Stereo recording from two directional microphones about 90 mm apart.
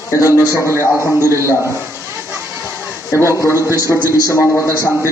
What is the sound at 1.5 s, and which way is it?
Speech, 35° left (ahead or behind).